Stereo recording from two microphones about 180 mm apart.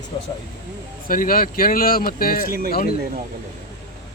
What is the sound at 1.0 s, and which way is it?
Speech, 50° left (ahead or behind).